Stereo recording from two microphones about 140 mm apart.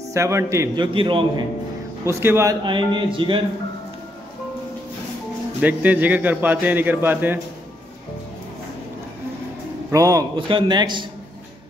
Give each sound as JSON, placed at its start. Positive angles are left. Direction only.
{"t": 0.1, "sound": "a man's voice", "side_deg": -20}
{"t": 0.7, "sound": "speech", "side_deg": -35}
{"t": 2.0, "sound": "a man's voice", "side_deg": -20}
{"t": 2.6, "sound": "speech", "side_deg": -35}
{"t": 5.6, "sound": "a man's voice", "side_deg": -10}
{"t": 9.8, "sound": "a man's voice", "side_deg": -25}